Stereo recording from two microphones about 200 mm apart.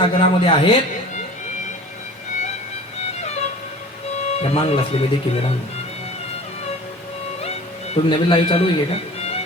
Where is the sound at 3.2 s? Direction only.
35° left (ahead or behind).